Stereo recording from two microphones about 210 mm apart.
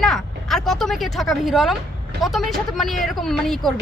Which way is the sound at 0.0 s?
Centre (ahead or behind).